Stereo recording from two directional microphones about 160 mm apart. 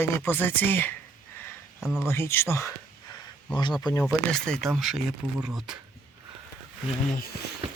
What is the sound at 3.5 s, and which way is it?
Speech, 25° left (ahead or behind).